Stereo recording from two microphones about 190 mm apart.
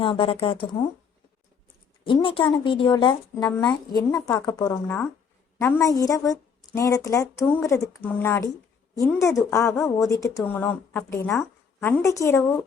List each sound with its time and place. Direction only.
0.0 s speech: 25° left (ahead or behind)
2.0 s a woman's voice: 25° left (ahead or behind)